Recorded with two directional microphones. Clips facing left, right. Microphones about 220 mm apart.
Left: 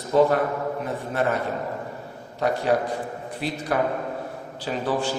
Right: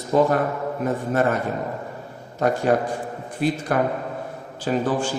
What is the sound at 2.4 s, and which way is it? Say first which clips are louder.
A man's voice: right 2 dB; 45° right (ahead or behind).